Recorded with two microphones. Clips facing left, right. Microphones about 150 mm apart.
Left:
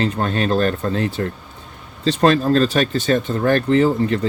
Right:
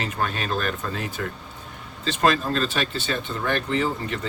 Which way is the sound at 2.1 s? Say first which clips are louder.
Left 7 dB; 35° left (ahead or behind).